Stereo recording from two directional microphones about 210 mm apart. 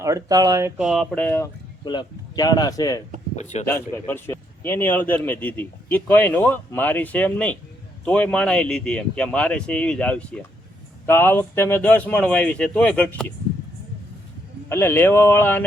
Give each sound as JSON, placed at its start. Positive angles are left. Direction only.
{"t": 0.0, "sound": "speech", "side_deg": -15}
{"t": 0.9, "sound": "a man's voice", "side_deg": 5}
{"t": 1.8, "sound": "speech", "side_deg": 20}
{"t": 3.3, "sound": "a man's voice", "side_deg": 30}
{"t": 3.7, "sound": "a man's voice", "side_deg": 10}
{"t": 14.7, "sound": "a man's voice", "side_deg": 10}